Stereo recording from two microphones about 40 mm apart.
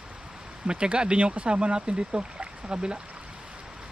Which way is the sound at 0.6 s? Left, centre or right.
Right.